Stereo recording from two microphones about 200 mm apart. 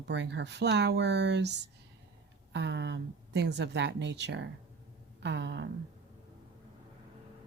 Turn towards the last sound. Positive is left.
turn(degrees=-60)  # may be behind; listen again after turning